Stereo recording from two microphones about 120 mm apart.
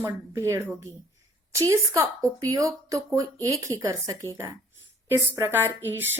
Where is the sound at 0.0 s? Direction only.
25° right (ahead or behind).